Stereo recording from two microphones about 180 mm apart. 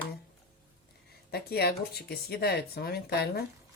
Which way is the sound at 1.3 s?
60° left (ahead or behind).